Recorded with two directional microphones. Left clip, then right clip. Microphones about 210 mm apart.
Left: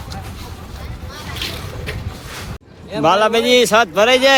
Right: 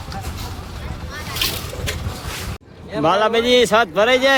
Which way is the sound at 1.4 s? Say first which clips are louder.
Right 4 dB; 50° right (ahead or behind).